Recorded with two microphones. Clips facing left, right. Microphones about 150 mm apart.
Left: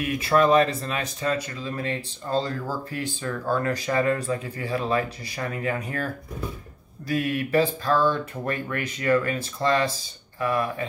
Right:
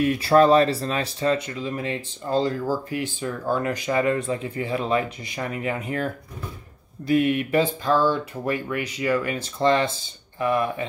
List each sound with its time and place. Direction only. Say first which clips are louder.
0.0 s speech: right 4 dB; 30° right (ahead or behind)
7.1 s speech: right 4 dB; 20° right (ahead or behind)